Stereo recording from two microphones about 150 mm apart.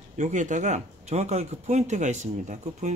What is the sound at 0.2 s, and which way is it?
Speech, 55° right (ahead or behind).